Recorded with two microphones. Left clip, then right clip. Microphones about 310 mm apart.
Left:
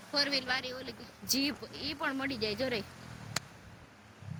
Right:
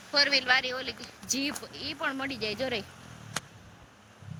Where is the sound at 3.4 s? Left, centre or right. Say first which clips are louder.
Right 1 dB; centre.